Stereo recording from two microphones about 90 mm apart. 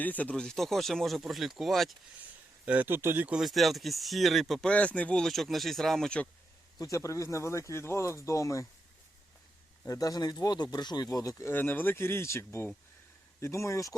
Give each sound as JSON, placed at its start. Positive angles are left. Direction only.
{"t": 0.0, "sound": "speech", "side_deg": 20}
{"t": 2.6, "sound": "speech", "side_deg": -20}
{"t": 3.4, "sound": "speech", "side_deg": 0}
{"t": 4.7, "sound": "speech", "side_deg": 15}
{"t": 6.7, "sound": "speech", "side_deg": 40}
{"t": 9.8, "sound": "speech", "side_deg": 40}
{"t": 11.5, "sound": "speech", "side_deg": 20}